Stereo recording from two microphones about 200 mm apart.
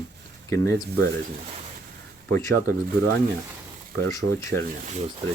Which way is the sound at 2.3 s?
15° left (ahead or behind).